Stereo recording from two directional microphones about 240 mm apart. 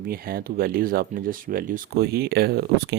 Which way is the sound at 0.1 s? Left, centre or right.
Right.